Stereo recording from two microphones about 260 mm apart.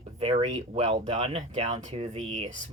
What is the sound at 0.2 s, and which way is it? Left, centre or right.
Speech, right.